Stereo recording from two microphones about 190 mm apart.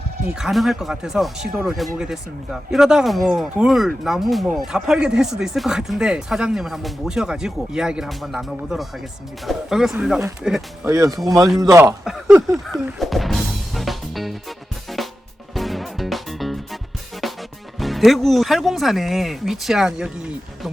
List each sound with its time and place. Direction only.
0.3 s speech: centre (ahead or behind)
10.8 s speech: 15° right (ahead or behind)
12.0 s a sound: centre (ahead or behind)
12.8 s music: centre (ahead or behind)
14.9 s drum: centre (ahead or behind)
15.5 s music: centre (ahead or behind)
17.7 s speech: centre (ahead or behind)